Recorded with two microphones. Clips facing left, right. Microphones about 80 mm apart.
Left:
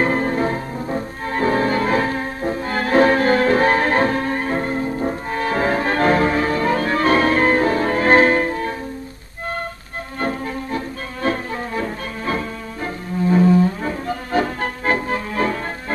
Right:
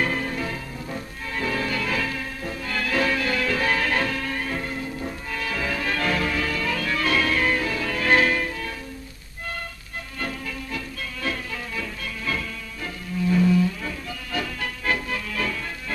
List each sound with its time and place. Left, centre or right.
0.0 s music: left
10.2 s music: left